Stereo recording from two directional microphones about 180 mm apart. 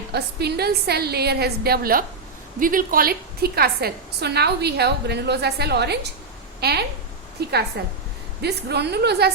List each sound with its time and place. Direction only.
0.1 s a woman's voice: 65° right (ahead or behind)